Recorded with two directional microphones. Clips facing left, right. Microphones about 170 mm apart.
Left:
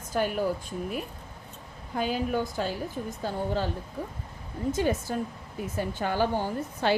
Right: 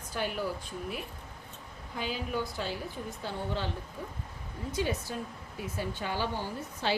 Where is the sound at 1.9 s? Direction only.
50° left (ahead or behind).